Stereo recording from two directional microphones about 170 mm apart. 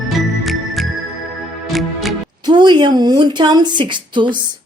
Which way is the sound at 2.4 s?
25° right (ahead or behind).